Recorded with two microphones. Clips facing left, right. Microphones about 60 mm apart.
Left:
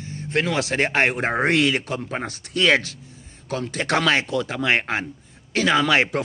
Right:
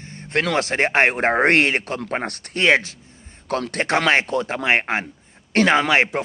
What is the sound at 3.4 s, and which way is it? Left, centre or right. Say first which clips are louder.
Speech: right 3 dB; right.